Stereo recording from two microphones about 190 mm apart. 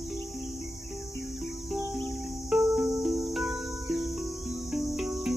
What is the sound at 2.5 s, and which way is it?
Cricket, centre (ahead or behind).